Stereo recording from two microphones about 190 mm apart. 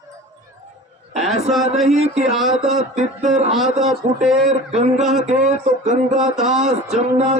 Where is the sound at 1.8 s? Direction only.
35° right (ahead or behind).